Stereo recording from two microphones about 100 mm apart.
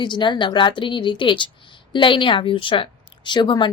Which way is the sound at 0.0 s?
50° left (ahead or behind).